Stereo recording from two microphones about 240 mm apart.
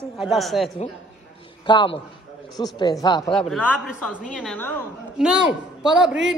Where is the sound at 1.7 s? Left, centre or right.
Centre.